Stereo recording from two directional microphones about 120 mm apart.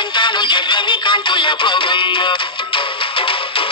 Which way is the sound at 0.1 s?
40° left (ahead or behind).